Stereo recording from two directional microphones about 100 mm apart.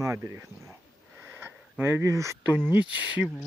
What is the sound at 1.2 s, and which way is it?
Sniff, 20° right (ahead or behind).